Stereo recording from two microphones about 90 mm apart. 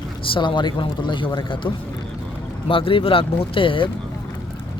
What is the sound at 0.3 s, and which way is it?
A man's voice, 60° left (ahead or behind).